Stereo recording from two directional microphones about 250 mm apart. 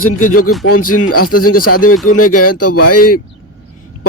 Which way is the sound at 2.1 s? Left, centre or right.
Left.